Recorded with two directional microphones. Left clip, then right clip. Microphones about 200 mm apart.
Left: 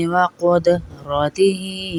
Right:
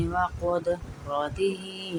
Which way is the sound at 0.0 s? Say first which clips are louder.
Left 10 dB; 35° left (ahead or behind).